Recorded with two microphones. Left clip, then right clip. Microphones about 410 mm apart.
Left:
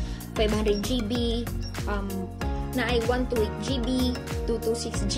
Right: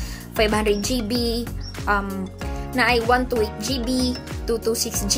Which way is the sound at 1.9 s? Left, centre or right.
Left.